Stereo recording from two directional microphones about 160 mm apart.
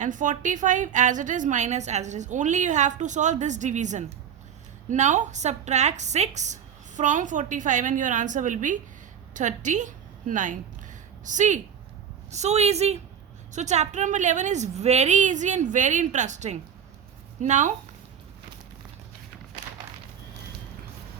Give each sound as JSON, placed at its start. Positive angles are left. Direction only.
{"t": 0.0, "sound": "a woman's voice", "side_deg": -50}